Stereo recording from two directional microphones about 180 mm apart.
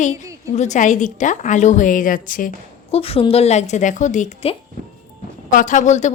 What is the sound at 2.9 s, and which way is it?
A woman's voice, 35° left (ahead or behind).